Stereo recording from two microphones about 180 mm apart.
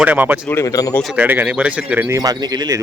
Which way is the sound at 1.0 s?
10° right (ahead or behind).